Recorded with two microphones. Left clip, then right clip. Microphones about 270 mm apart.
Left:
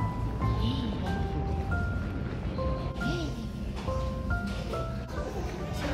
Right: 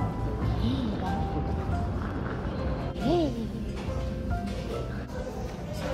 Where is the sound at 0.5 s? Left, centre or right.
Centre.